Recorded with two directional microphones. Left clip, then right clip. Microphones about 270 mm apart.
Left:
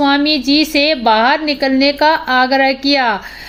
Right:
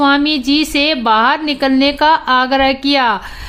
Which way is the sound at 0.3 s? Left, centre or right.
Centre.